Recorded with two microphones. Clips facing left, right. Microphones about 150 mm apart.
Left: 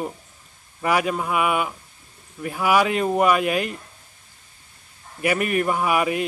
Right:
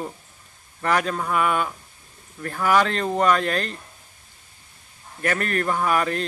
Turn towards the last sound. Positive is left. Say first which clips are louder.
# left 1 dB
turn(degrees=10)  # may be behind; listen again after turning